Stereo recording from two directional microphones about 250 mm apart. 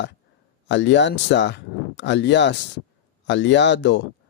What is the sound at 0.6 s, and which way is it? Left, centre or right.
Speech, left.